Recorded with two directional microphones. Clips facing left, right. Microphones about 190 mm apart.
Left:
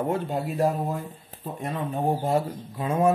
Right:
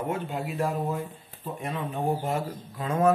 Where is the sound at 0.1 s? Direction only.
35° left (ahead or behind).